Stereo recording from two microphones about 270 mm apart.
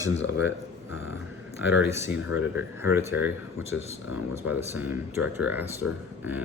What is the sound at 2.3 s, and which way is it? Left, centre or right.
Speech, left.